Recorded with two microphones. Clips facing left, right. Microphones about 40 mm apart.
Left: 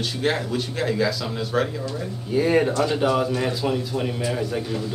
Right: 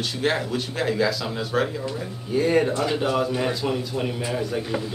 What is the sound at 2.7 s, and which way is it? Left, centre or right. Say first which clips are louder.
Speech: left 2 dB; centre.